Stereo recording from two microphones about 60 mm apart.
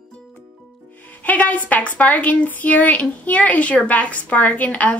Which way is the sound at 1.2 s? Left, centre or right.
Left.